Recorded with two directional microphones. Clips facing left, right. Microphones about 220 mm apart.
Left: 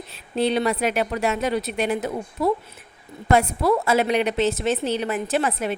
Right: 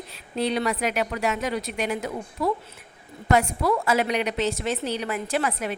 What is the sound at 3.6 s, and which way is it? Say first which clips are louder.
A woman's voice: left 3 dB; 25° left (ahead or behind).